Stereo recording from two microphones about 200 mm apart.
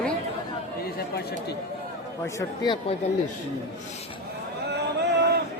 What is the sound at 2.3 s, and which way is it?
Speech, 20° left (ahead or behind).